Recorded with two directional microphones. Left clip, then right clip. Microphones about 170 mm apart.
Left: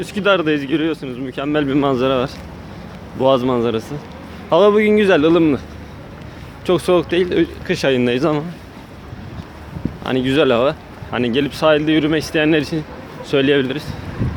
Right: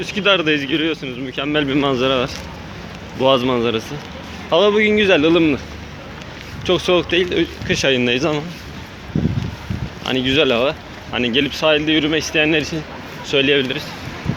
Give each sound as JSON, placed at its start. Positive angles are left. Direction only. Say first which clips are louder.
{"t": 0.0, "sound": "speech", "louder": "even", "side_deg": 30}
{"t": 4.4, "sound": "speech", "louder": "left 2 dB", "side_deg": 35}
{"t": 6.7, "sound": "speech", "louder": "left 1 dB", "side_deg": 30}
{"t": 10.0, "sound": "speech", "louder": "even", "side_deg": 40}